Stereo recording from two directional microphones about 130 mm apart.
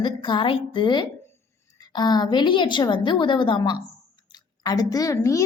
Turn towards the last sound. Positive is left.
turn(degrees=25)  # may be behind; listen again after turning